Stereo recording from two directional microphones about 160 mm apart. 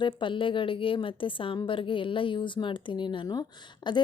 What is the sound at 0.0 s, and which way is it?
A woman's voice, 30° left (ahead or behind).